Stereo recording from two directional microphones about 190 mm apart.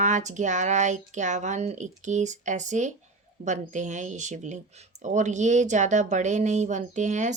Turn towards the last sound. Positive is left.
turn(degrees=-40)  # may be behind; listen again after turning